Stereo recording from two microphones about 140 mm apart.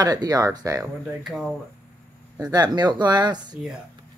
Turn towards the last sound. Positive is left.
turn(degrees=-30)  # may be behind; listen again after turning